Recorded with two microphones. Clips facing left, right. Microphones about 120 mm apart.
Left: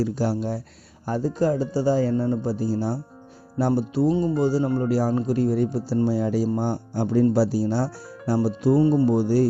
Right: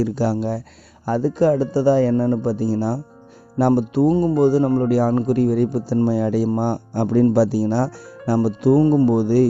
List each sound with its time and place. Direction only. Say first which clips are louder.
0.0 s a man's voice: right 4 dB; 80° right; by 8.8 s 65° right (ahead or behind)
8.8 s speech: right 3 dB; 45° right (ahead or behind)
9.0 s a man's voice: right 4 dB; 65° right (ahead or behind)